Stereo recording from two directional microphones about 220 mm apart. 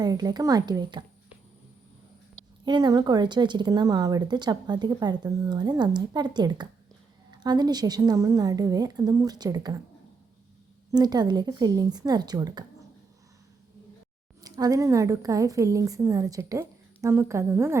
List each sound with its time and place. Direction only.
0.0 s a woman's voice: 15° right (ahead or behind)
2.6 s a woman's voice: 20° right (ahead or behind)
10.9 s a woman's voice: 20° right (ahead or behind)
14.4 s a woman's voice: 15° right (ahead or behind)